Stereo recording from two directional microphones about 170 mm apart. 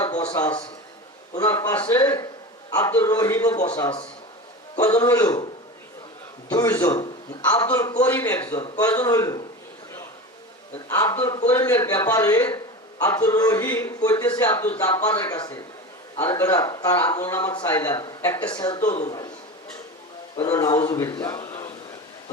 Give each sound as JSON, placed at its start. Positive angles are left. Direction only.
{"t": 0.4, "sound": "a man's voice", "side_deg": 15}
{"t": 6.5, "sound": "speech", "side_deg": 20}
{"t": 10.8, "sound": "speech", "side_deg": 15}
{"t": 20.4, "sound": "speech", "side_deg": 20}